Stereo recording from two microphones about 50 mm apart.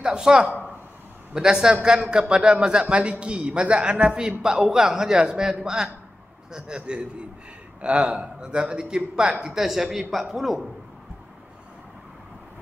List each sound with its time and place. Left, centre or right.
0.0 s a man's voice: centre